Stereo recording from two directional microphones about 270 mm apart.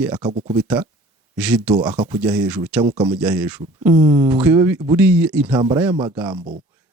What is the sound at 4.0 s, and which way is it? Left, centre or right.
A man's voice, centre.